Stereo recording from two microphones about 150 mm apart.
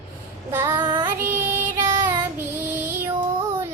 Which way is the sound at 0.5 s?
15° right (ahead or behind).